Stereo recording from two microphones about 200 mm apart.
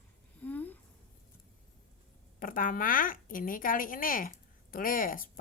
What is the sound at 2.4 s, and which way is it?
A woman's voice, 45° left (ahead or behind).